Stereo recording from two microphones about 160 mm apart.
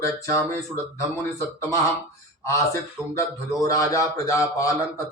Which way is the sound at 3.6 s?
20° left (ahead or behind).